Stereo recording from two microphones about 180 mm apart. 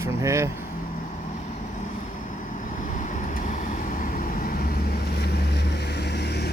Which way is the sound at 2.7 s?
45° left (ahead or behind).